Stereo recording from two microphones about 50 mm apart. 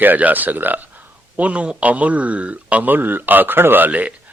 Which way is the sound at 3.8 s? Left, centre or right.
Right.